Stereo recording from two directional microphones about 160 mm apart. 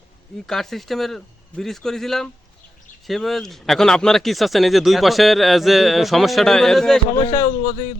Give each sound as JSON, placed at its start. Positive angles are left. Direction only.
{"t": 0.4, "sound": "speech", "side_deg": 0}
{"t": 7.3, "sound": "a man's voice", "side_deg": 50}